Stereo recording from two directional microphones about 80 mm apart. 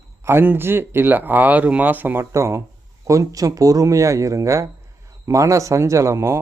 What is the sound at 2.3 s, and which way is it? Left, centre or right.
Speech, right.